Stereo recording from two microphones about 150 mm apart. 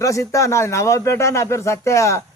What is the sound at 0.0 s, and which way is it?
Speech, 20° left (ahead or behind).